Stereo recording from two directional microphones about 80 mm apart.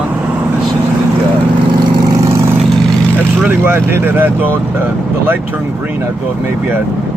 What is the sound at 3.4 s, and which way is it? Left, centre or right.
Speech, right.